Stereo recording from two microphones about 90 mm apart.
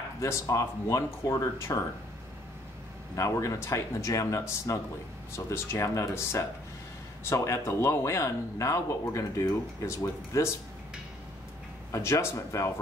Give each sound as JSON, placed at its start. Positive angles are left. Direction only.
{"t": 0.2, "sound": "speech", "side_deg": 35}
{"t": 3.2, "sound": "speech", "side_deg": 35}
{"t": 11.9, "sound": "speech", "side_deg": 30}